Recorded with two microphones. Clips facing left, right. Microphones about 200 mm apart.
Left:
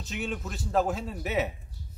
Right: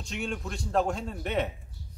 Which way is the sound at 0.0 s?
Centre (ahead or behind).